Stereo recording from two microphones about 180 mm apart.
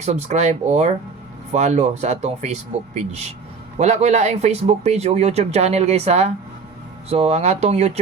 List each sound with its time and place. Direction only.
0.0 s speech: 40° right (ahead or behind)